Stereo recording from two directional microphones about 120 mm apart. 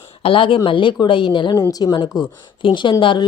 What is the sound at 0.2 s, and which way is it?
Speech, 50° left (ahead or behind).